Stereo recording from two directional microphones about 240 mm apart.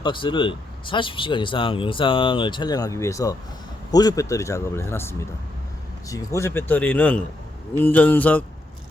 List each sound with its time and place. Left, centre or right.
0.0 s speech: centre